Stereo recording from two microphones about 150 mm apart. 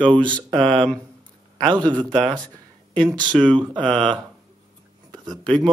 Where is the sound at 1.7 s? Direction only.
30° right (ahead or behind).